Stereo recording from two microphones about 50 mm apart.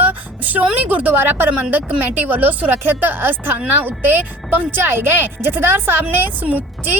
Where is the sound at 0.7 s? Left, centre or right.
Right.